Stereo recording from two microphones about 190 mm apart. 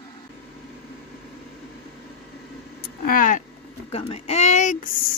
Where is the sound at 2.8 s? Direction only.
45° left (ahead or behind).